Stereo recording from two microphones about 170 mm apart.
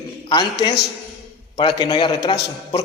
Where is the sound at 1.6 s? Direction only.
30° left (ahead or behind).